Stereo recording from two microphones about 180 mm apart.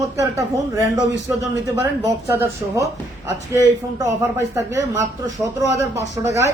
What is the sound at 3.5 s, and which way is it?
Speech, 15° right (ahead or behind).